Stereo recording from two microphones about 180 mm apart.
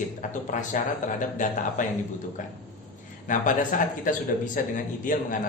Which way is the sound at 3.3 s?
45° left (ahead or behind).